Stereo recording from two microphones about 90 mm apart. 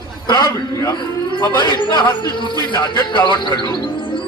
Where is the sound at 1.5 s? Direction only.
55° left (ahead or behind).